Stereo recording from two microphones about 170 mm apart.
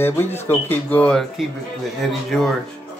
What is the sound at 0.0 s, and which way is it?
Speech, 15° left (ahead or behind).